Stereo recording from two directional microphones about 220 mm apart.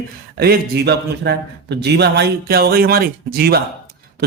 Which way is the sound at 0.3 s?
45° right (ahead or behind).